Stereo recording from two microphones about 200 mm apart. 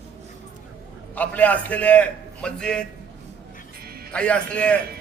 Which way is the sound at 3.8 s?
50° right (ahead or behind).